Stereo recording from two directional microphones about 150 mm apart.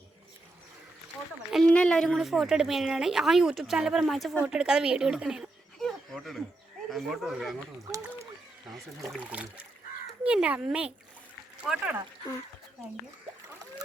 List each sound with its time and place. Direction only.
1.5 s a woman's voice: 5° left (ahead or behind)
7.9 s a sound: 20° right (ahead or behind)
9.0 s a child's voice: 5° right (ahead or behind)